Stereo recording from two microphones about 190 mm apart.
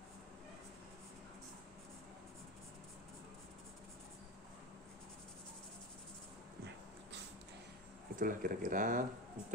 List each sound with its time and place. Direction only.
8.2 s speech: 45° right (ahead or behind)